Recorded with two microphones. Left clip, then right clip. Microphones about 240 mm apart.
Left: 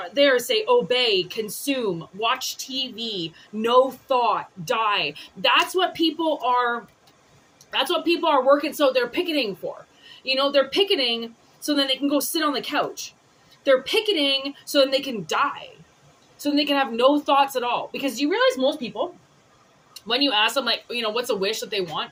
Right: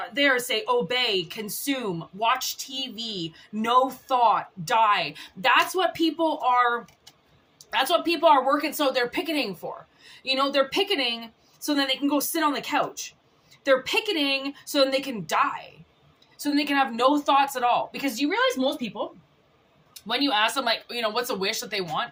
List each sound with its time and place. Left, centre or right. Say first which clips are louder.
0.0 s speech: left 4 dB; right
7.7 s speech: left 1 dB; right
20.1 s speech: left 3 dB; right